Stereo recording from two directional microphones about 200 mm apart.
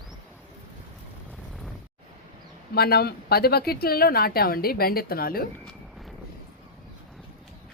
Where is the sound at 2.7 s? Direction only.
50° left (ahead or behind).